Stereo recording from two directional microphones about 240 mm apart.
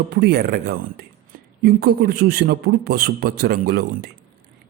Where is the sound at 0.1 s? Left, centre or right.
Right.